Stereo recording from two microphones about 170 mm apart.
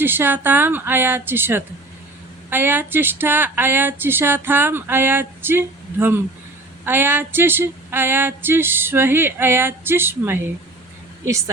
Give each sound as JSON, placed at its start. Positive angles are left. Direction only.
{"t": 0.0, "sound": "speech", "side_deg": -10}